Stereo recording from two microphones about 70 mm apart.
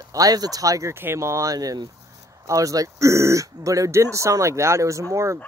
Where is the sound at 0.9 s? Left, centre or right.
Right.